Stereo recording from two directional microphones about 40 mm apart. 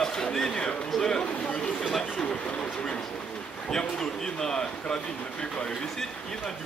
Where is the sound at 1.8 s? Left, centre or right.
Centre.